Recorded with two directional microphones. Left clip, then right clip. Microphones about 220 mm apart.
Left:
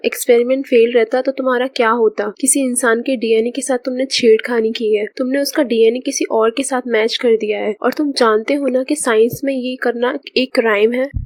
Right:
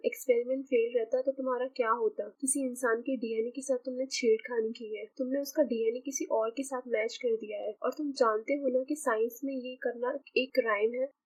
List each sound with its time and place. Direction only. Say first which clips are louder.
0.0 s speech: left 16 dB; 40° left (ahead or behind)